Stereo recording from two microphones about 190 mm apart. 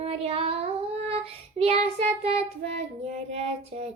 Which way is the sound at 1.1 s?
30° right (ahead or behind).